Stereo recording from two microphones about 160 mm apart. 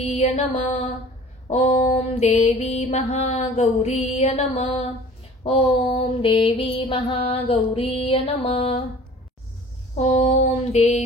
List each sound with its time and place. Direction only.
0.0 s mantra: 45° left (ahead or behind)
9.9 s mantra: 45° left (ahead or behind)